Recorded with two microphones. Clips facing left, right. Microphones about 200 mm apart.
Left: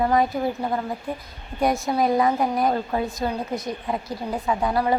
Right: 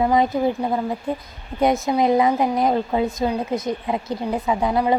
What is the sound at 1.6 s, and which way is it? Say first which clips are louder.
A woman's voice: right 3 dB; 20° right (ahead or behind).